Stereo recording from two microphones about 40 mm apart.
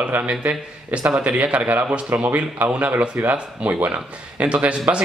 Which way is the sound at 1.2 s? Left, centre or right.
Right.